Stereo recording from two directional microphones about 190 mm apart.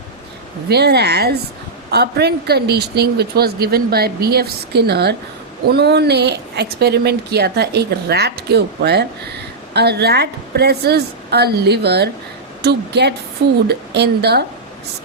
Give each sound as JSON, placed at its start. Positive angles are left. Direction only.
{"t": 0.7, "sound": "a woman's voice", "side_deg": -60}